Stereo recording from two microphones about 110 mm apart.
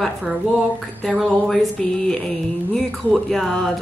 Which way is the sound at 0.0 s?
5° right (ahead or behind).